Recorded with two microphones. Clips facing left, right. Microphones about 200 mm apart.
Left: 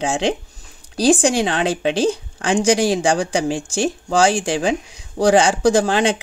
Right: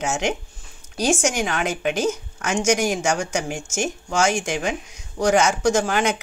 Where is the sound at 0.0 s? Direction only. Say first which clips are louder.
Left 4 dB; 30° left (ahead or behind).